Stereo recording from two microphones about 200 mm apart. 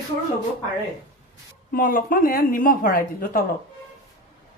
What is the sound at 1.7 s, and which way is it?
A woman's voice, 45° left (ahead or behind).